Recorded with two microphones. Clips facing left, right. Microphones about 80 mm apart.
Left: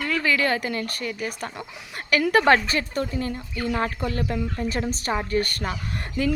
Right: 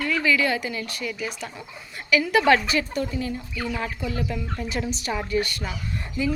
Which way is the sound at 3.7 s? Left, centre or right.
Left.